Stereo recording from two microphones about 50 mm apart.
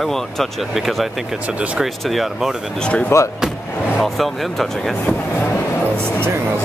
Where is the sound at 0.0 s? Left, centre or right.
Centre.